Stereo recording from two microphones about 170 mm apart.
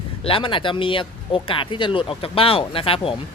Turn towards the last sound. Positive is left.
turn(degrees=35)  # may be behind; listen again after turning